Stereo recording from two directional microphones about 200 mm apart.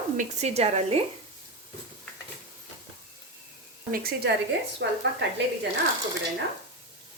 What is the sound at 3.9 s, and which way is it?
Speech, 50° right (ahead or behind).